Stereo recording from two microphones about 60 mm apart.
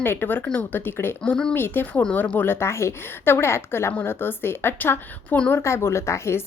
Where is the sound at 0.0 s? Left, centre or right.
Left.